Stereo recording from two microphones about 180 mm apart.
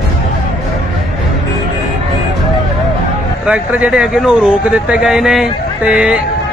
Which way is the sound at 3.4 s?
5° right (ahead or behind).